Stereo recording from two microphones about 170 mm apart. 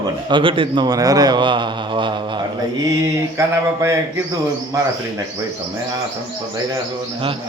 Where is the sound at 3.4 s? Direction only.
15° right (ahead or behind).